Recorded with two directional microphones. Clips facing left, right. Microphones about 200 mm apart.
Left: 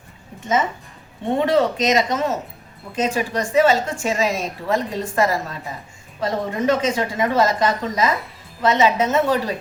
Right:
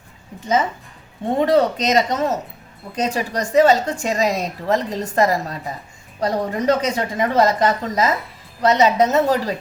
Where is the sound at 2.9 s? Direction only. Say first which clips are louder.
Even; 40° right (ahead or behind).